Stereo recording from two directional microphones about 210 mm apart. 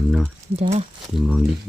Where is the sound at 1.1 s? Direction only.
5° right (ahead or behind).